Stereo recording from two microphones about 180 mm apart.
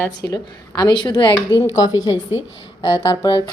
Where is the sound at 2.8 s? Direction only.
25° left (ahead or behind).